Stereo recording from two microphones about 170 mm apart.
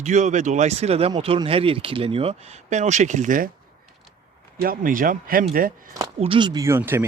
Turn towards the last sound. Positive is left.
turn(degrees=-15)  # may be behind; listen again after turning